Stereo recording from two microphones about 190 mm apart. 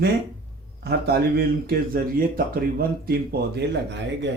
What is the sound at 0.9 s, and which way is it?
Speech, 55° right (ahead or behind).